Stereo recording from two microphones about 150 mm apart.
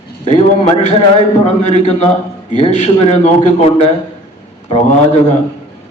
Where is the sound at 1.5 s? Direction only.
45° left (ahead or behind).